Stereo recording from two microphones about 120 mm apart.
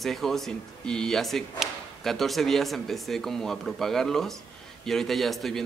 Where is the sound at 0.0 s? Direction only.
Centre (ahead or behind).